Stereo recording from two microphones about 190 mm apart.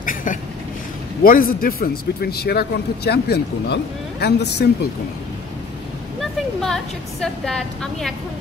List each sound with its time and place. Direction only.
0.0 s a sound: 45° left (ahead or behind)
1.2 s a man's voice: 50° left (ahead or behind)
6.6 s a woman's voice: centre (ahead or behind)